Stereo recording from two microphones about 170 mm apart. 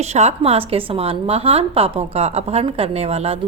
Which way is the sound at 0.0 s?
40° right (ahead or behind).